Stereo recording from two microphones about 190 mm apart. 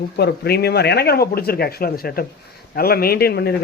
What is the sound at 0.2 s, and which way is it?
A man's voice, 60° left (ahead or behind).